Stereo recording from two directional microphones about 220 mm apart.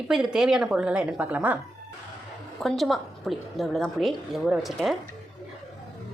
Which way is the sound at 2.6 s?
Centre (ahead or behind).